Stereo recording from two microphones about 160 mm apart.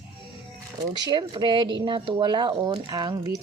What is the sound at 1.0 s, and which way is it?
Speech, 25° right (ahead or behind).